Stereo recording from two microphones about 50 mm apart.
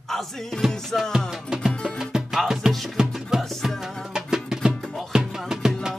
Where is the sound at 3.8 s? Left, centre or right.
Centre.